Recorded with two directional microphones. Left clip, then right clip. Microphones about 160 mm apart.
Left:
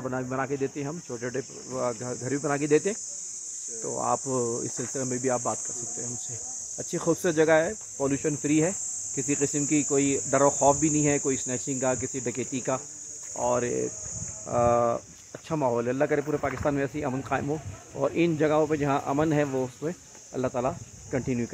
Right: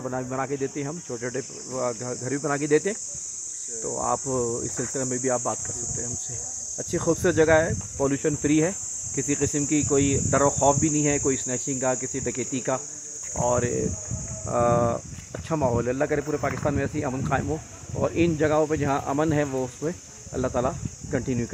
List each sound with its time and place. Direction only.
0.0 s speech: 15° left (ahead or behind)
6.9 s cricket: 20° left (ahead or behind)
13.4 s speech: 20° left (ahead or behind)